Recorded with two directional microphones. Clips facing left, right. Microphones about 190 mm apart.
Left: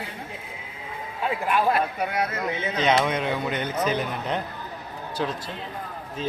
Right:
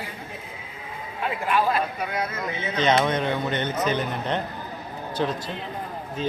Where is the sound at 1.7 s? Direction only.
70° left (ahead or behind).